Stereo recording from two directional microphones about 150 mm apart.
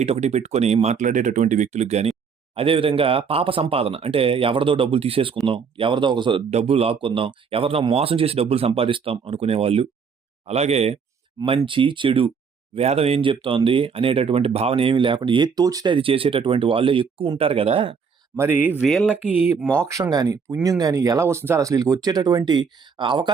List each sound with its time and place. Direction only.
0.0 s speech: 45° right (ahead or behind)
6.5 s speech: 45° right (ahead or behind)
18.3 s speech: 10° right (ahead or behind)
18.9 s speech: centre (ahead or behind)
19.1 s speech: 10° right (ahead or behind)
19.9 s speech: 25° right (ahead or behind)